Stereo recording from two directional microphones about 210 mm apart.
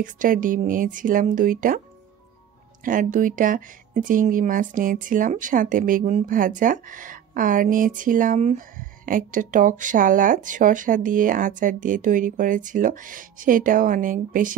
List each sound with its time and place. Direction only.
0.0 s speech: 40° right (ahead or behind)
2.8 s speech: 40° right (ahead or behind)